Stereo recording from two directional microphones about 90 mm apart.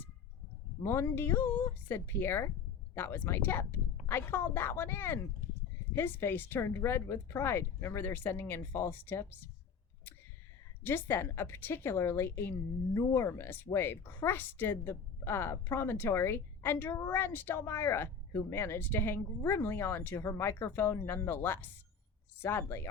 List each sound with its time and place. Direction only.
0.8 s a woman's voice: 30° left (ahead or behind)
10.8 s a woman's voice: 25° left (ahead or behind)